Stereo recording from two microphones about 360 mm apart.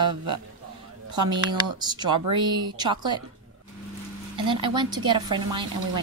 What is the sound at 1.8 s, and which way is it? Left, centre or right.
Speech, centre.